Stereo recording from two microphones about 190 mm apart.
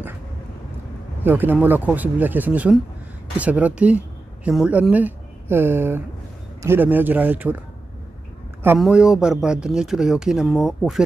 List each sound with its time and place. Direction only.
1.2 s speech: 10° right (ahead or behind)
8.7 s speech: 5° right (ahead or behind)